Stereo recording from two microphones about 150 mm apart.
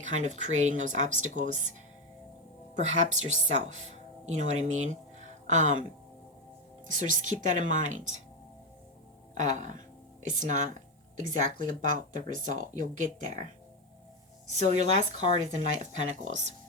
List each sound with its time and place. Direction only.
0.0 s speech: 50° right (ahead or behind)
2.7 s speech: 50° right (ahead or behind)
6.9 s speech: 55° right (ahead or behind)
9.4 s speech: 55° right (ahead or behind)
14.5 s speech: 50° right (ahead or behind)